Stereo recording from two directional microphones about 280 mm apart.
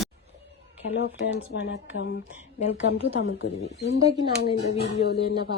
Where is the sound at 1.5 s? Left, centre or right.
Left.